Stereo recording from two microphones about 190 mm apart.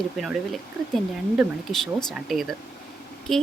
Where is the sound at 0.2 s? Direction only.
Centre (ahead or behind).